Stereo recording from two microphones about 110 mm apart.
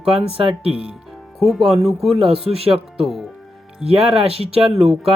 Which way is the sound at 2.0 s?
60° right (ahead or behind).